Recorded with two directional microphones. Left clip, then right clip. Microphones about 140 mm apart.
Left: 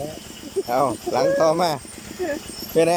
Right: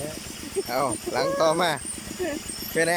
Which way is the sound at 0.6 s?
5° left (ahead or behind).